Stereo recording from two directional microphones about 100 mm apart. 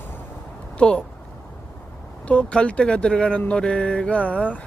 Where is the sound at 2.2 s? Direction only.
10° left (ahead or behind).